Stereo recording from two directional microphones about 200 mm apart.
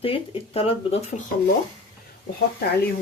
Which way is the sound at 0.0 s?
30° left (ahead or behind).